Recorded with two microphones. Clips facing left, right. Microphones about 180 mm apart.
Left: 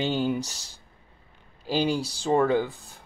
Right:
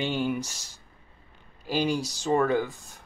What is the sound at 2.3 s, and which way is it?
Speech, 15° left (ahead or behind).